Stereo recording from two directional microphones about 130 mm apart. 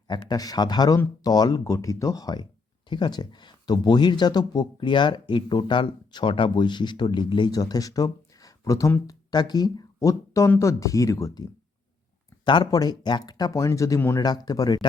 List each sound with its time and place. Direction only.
0.1 s speech: 35° left (ahead or behind)
12.5 s speech: 35° left (ahead or behind)